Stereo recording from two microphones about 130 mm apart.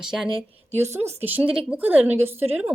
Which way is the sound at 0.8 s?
20° right (ahead or behind).